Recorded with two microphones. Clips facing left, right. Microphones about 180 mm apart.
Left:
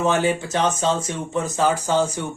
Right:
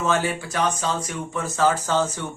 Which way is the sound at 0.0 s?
20° left (ahead or behind).